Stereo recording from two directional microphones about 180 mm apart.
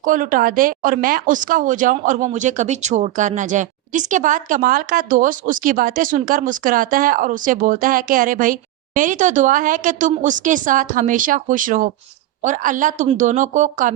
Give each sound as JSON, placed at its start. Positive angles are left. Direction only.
{"t": 0.0, "sound": "a woman's voice", "side_deg": -50}